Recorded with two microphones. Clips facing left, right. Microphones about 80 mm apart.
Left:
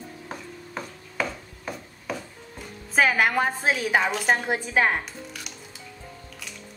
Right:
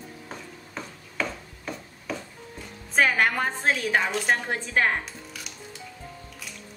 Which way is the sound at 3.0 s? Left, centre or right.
Centre.